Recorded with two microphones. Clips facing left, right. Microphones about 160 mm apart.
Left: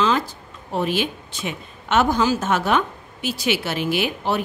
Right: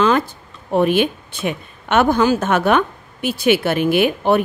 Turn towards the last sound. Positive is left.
turn(degrees=-55)  # may be behind; listen again after turning